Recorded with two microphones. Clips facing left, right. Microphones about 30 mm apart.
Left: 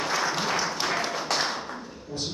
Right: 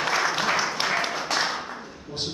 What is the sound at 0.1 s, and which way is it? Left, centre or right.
Applause, right.